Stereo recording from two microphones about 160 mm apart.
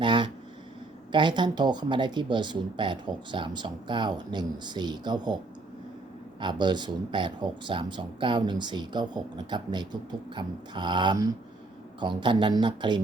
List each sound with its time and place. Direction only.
0.0 s a sound: 30° right (ahead or behind)
1.1 s speech: 30° right (ahead or behind)
6.4 s speech: 30° right (ahead or behind)